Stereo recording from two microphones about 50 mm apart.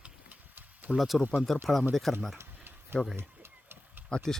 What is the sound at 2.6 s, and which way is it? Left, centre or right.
Tick-tock, right.